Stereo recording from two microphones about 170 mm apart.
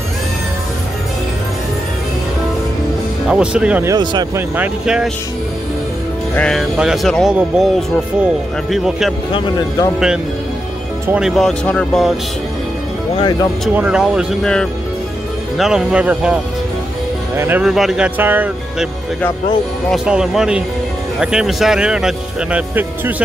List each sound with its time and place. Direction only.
3.3 s speech: 5° right (ahead or behind)
3.9 s speech: 25° right (ahead or behind)
4.4 s speech: 5° right (ahead or behind)
6.3 s speech: 5° left (ahead or behind)
9.3 s speech: 25° left (ahead or behind)
9.9 s speech: 5° right (ahead or behind)
13.2 s speech: 25° left (ahead or behind)
13.7 s speech: 5° right (ahead or behind)
17.4 s speech: 10° right (ahead or behind)
19.9 s speech: 5° right (ahead or behind)